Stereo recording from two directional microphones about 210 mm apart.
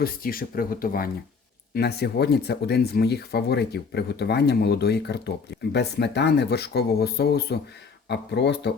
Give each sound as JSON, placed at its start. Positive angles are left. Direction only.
{"t": 0.0, "sound": "speech", "side_deg": 45}